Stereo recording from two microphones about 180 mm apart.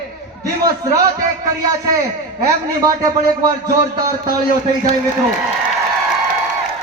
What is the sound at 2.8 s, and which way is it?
Speech, 20° right (ahead or behind).